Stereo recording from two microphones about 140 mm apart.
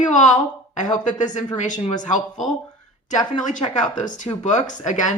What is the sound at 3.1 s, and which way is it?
Speech, 65° left (ahead or behind).